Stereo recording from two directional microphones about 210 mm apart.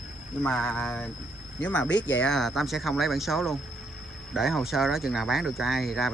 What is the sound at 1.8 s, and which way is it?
Speech, 60° left (ahead or behind).